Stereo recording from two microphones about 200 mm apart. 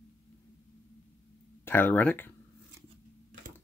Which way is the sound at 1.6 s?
10° left (ahead or behind).